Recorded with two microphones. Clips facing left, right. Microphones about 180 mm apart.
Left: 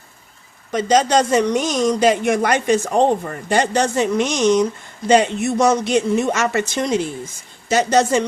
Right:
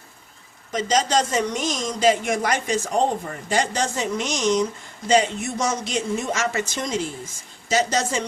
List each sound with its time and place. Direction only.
0.7 s a woman's voice: 60° left (ahead or behind)